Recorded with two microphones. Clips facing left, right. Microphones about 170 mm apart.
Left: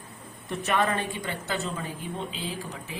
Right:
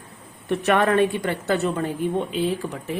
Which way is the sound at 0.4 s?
65° right (ahead or behind).